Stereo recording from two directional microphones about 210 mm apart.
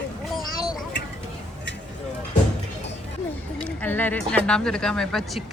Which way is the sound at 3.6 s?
10° left (ahead or behind).